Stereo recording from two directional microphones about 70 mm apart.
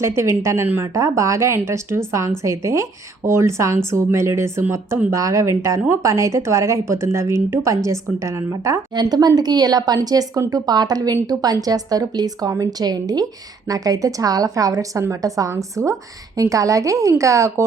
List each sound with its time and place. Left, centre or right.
0.0 s a woman's voice: right
9.0 s a woman's voice: right